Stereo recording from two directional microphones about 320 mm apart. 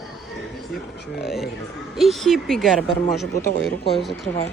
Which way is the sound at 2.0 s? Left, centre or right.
Centre.